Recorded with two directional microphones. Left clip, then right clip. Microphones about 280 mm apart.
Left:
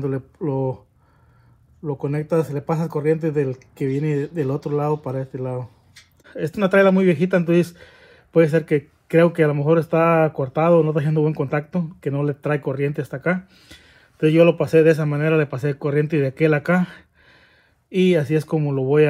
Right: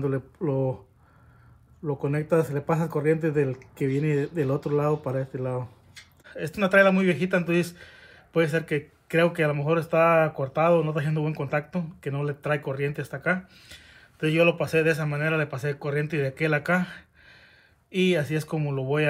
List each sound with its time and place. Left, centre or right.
0.0 s speech: centre
1.9 s speech: centre